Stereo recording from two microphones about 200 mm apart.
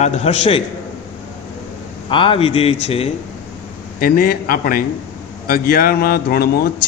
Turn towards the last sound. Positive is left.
turn(degrees=50)  # may be behind; listen again after turning